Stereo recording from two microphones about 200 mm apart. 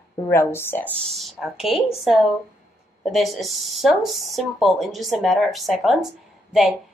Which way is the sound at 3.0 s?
Centre (ahead or behind).